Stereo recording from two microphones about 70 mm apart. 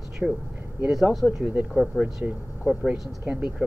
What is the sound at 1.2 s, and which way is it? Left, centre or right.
Speech, right.